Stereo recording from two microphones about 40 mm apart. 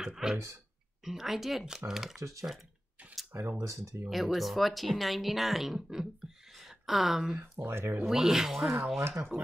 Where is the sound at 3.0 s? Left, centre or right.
Right.